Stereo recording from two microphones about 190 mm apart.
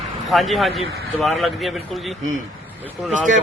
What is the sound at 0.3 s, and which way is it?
Speech, centre (ahead or behind).